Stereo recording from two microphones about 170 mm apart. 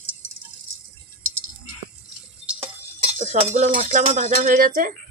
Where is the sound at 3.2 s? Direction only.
45° right (ahead or behind).